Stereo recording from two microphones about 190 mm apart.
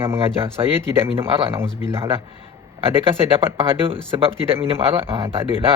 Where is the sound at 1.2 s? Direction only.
30° right (ahead or behind).